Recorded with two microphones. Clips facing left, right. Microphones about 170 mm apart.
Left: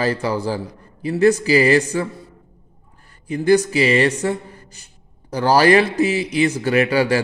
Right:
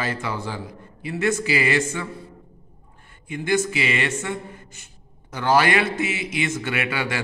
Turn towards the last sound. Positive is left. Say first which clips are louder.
# left 10 dB
turn(degrees=35)  # may be behind; listen again after turning